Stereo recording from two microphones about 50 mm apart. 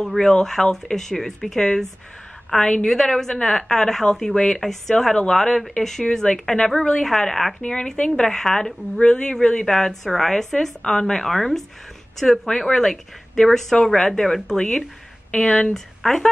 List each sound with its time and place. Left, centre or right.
0.0 s a woman's voice: centre
2.9 s a woman's voice: centre